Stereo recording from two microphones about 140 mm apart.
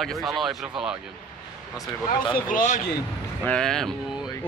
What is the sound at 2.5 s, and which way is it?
Speech, 80° left.